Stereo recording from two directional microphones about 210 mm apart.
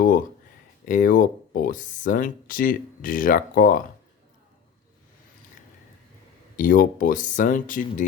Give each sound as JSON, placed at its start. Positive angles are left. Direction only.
{"t": 0.9, "sound": "speech", "side_deg": 40}
{"t": 6.6, "sound": "speech", "side_deg": 40}